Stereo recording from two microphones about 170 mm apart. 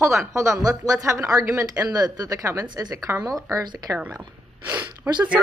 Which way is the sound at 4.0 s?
10° right (ahead or behind).